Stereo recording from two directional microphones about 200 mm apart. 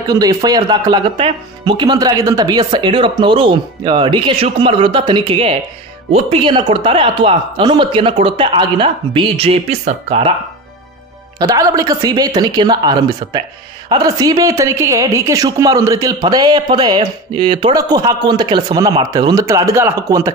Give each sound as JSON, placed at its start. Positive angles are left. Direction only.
{"t": 0.1, "sound": "a woman's voice", "side_deg": -20}
{"t": 11.3, "sound": "a woman's voice", "side_deg": -20}